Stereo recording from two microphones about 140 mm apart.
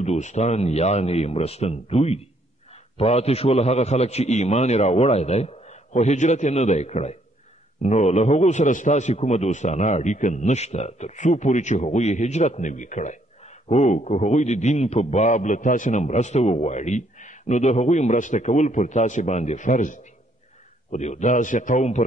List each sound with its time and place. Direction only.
0.0 s a man's voice: 55° left (ahead or behind)